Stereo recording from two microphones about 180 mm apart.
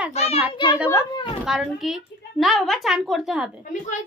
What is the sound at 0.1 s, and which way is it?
Speech, 35° left (ahead or behind).